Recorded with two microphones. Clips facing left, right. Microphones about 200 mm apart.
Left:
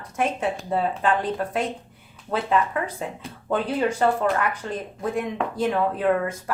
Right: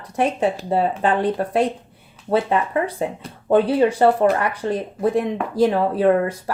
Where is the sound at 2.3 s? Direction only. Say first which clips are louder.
Right 4 dB; 35° right (ahead or behind).